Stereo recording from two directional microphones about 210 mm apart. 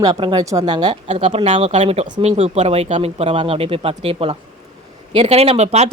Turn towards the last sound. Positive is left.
turn(degrees=-30)  # may be behind; listen again after turning